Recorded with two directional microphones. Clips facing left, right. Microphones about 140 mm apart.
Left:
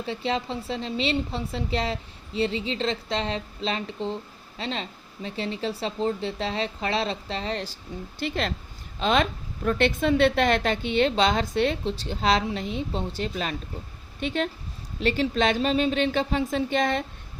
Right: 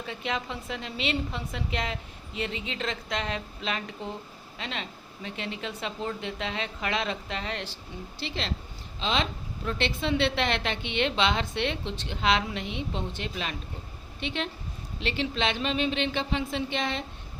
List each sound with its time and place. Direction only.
0.0 s a woman's voice: 30° left (ahead or behind)
8.2 s a woman's voice: 50° left (ahead or behind)